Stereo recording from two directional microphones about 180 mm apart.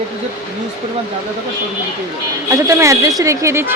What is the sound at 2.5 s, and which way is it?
Speech, 15° right (ahead or behind).